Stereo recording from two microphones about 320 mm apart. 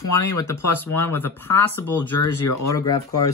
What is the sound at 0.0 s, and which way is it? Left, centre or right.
Speech, left.